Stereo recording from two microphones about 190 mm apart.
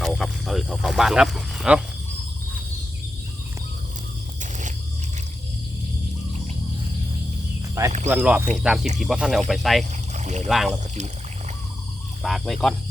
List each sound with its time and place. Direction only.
0.0 s speech: centre (ahead or behind)
7.8 s speech: 15° right (ahead or behind)
10.2 s speech: 35° right (ahead or behind)
10.5 s speech: centre (ahead or behind)
12.2 s speech: centre (ahead or behind)